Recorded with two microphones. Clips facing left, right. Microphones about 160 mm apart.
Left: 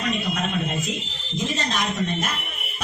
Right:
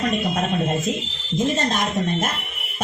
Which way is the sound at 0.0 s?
50° right (ahead or behind).